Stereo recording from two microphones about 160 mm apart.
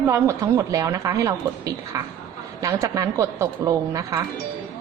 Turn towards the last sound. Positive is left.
turn(degrees=-20)  # may be behind; listen again after turning